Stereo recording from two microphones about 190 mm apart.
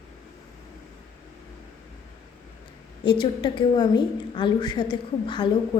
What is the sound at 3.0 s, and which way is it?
A woman's voice, 25° left (ahead or behind).